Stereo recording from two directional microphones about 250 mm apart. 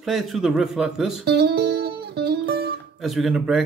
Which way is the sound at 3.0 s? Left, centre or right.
Centre.